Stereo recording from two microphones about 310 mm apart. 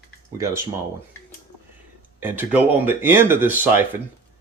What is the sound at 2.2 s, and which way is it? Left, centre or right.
Speech, centre.